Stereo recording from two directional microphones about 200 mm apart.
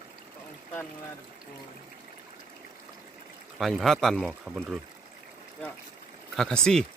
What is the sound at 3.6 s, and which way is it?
Speech, centre (ahead or behind).